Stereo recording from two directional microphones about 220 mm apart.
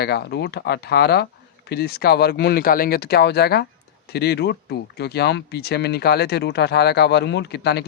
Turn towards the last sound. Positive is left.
turn(degrees=50)  # may be behind; listen again after turning